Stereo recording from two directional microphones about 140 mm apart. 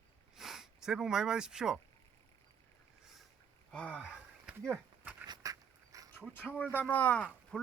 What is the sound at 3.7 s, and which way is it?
Speech, 10° left (ahead or behind).